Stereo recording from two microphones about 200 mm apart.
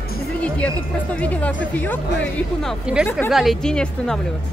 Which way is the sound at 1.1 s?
5° left (ahead or behind).